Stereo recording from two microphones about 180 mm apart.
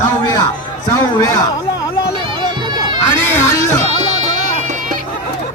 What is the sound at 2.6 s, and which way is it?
Music, 25° right (ahead or behind).